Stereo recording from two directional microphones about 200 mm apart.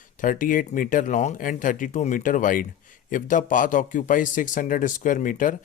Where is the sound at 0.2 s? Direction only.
40° left (ahead or behind).